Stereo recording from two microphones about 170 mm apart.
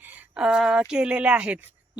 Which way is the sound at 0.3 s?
5° right (ahead or behind).